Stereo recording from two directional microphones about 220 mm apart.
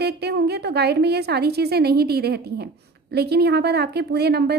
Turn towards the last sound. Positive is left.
turn(degrees=-50)  # may be behind; listen again after turning